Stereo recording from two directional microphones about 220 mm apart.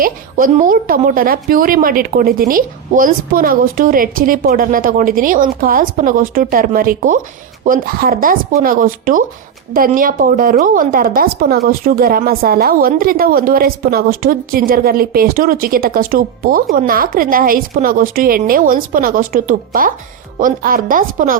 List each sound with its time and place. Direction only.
0.0 s a woman's voice: 40° right (ahead or behind)